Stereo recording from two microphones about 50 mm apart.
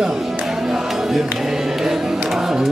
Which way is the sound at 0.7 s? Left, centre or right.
Centre.